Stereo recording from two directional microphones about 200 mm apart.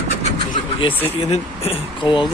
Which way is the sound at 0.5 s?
25° left (ahead or behind).